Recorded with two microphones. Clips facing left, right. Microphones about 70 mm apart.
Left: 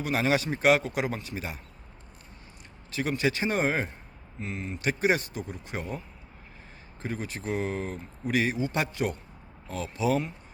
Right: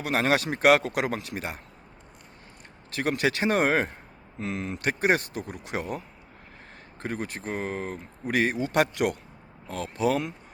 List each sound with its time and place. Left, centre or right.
0.0 s a man's voice: right
2.9 s a man's voice: right
4.4 s speech: right
4.8 s speech: right
7.0 s speech: right
8.5 s a man's voice: right
9.6 s speech: right